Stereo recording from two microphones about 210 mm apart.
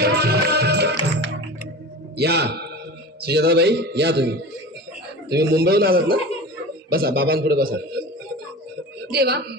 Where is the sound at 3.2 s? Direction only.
50° right (ahead or behind).